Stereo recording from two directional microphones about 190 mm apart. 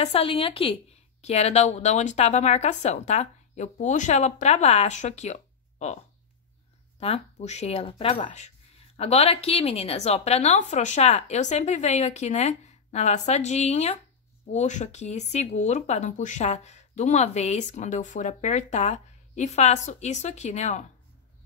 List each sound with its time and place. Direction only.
0.0 s speech: 30° left (ahead or behind)
7.0 s speech: 35° left (ahead or behind)